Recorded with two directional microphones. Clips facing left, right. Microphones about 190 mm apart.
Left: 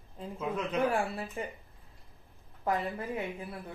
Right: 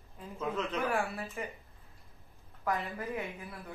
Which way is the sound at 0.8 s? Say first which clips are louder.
Left 7 dB; 30° left (ahead or behind).